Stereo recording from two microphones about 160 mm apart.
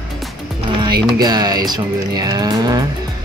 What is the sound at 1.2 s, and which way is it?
Speech, 25° right (ahead or behind).